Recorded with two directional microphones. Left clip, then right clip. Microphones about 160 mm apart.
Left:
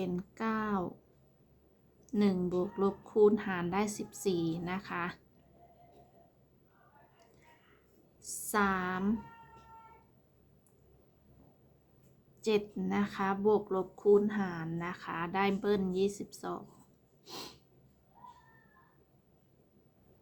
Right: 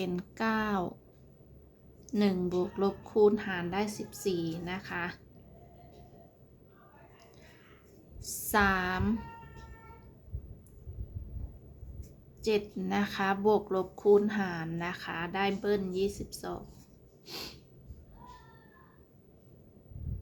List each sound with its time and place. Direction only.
0.0 s speech: 15° left (ahead or behind)
2.1 s a woman's voice: 15° left (ahead or behind)
8.4 s speech: 15° left (ahead or behind)
12.4 s speech: 25° left (ahead or behind)
17.2 s snort: 15° left (ahead or behind)